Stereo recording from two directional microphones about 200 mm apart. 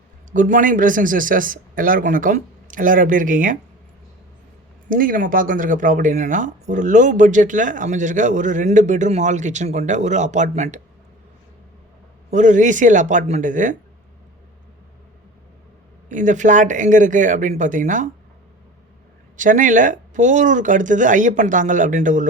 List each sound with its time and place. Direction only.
0.3 s speech: 40° right (ahead or behind)
4.9 s speech: 45° right (ahead or behind)
12.3 s speech: 40° right (ahead or behind)
16.0 s speech: 40° right (ahead or behind)
19.4 s speech: 40° right (ahead or behind)